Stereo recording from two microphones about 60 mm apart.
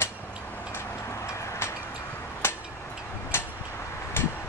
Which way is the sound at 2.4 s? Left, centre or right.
Left.